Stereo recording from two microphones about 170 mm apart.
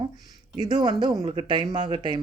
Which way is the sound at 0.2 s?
25° right (ahead or behind).